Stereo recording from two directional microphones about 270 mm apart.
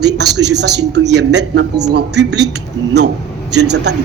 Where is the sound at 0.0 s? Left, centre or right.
Right.